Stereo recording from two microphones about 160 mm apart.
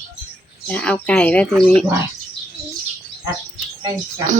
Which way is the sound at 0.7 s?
5° left (ahead or behind).